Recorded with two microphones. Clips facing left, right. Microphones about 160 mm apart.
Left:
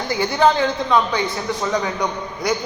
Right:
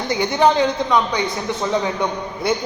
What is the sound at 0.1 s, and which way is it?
A man's voice, 20° right (ahead or behind).